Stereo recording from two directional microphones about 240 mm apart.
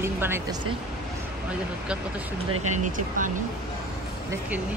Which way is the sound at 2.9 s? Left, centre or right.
Right.